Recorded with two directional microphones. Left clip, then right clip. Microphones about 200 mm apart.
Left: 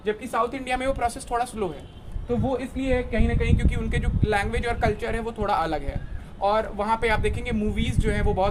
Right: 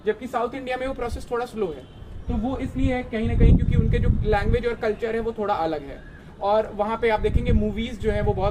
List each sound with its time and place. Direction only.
0.0 s speech: 60° left (ahead or behind)
2.8 s speech: 60° left (ahead or behind)